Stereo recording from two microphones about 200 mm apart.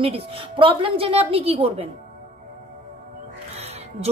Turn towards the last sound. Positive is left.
turn(degrees=-30)  # may be behind; listen again after turning